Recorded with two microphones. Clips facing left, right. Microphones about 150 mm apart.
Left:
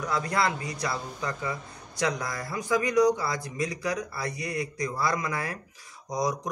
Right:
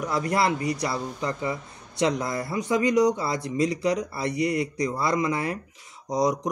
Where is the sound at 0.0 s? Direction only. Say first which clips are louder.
Right 3 dB; 25° right (ahead or behind).